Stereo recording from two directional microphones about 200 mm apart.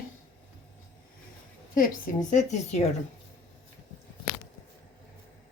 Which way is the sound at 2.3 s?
35° left (ahead or behind).